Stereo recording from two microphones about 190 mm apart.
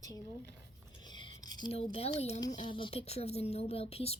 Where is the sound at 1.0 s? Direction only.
25° left (ahead or behind).